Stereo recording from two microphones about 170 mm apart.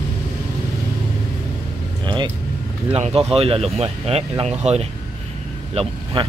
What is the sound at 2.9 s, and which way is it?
Speech, 35° right (ahead or behind).